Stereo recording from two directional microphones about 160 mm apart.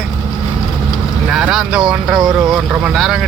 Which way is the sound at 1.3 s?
5° right (ahead or behind).